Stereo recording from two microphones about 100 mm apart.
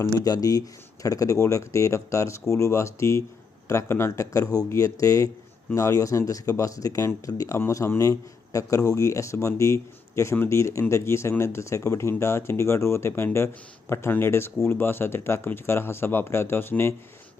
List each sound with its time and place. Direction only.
0.0 s speech: 35° left (ahead or behind)